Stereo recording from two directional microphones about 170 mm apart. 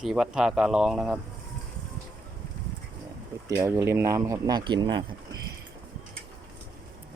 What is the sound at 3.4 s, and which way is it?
Speech, 15° right (ahead or behind).